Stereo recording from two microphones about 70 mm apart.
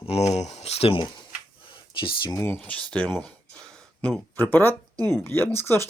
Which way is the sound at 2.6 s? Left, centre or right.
Centre.